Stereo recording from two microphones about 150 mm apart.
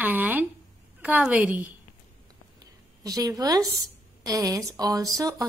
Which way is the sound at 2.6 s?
25° right (ahead or behind).